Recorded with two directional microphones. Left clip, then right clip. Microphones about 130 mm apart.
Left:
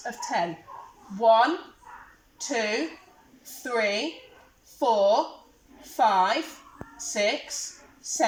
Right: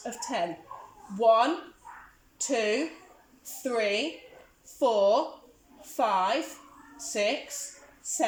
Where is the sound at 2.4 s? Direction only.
25° right (ahead or behind).